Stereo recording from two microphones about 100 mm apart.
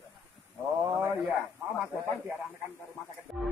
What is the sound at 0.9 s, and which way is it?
Speech, 25° right (ahead or behind).